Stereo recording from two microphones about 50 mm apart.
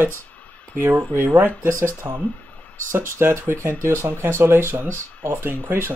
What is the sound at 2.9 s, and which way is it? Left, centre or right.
Speech, right.